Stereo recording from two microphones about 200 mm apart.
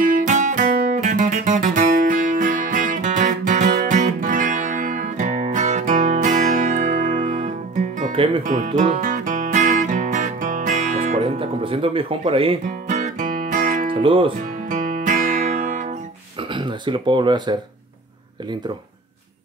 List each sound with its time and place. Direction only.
0.0 s music: 40° right (ahead or behind)
7.2 s music: 25° right (ahead or behind)
12.6 s music: 35° right (ahead or behind)
14.0 s speech: 25° right (ahead or behind)
14.7 s music: 40° right (ahead or behind)
16.5 s speech: 25° right (ahead or behind)